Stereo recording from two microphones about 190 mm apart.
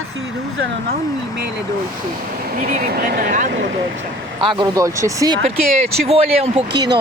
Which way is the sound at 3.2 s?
40° right (ahead or behind).